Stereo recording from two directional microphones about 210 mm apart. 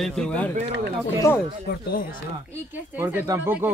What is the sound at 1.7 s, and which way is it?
Speech, 45° left (ahead or behind).